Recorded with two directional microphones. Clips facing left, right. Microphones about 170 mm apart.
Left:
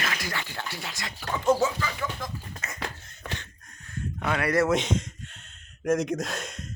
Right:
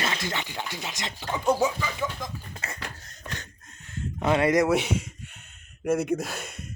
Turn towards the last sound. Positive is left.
turn(degrees=-5)  # may be behind; listen again after turning